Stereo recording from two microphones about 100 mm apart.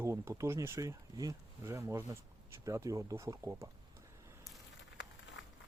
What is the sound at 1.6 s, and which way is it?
Speech, 25° right (ahead or behind).